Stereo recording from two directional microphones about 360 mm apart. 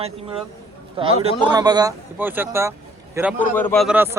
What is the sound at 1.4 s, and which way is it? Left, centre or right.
A man's voice, centre.